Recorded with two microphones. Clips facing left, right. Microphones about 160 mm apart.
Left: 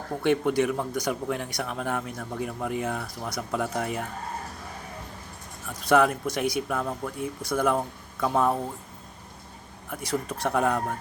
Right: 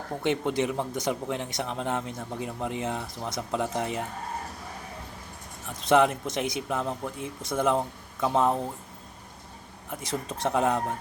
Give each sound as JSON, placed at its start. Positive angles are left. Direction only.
{"t": 0.2, "sound": "speech", "side_deg": -20}
{"t": 5.6, "sound": "speech", "side_deg": -20}
{"t": 9.9, "sound": "speech", "side_deg": -20}